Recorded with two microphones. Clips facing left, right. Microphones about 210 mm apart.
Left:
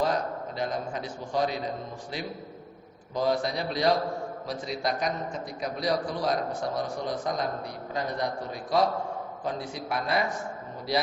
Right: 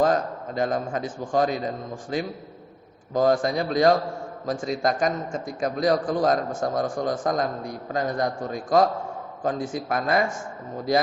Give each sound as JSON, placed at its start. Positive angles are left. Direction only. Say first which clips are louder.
{"t": 0.0, "sound": "a man's voice", "louder": "right 5 dB", "side_deg": -50}